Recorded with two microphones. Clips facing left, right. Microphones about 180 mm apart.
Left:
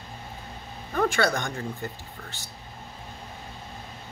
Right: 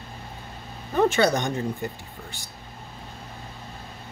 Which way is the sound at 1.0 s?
20° right (ahead or behind).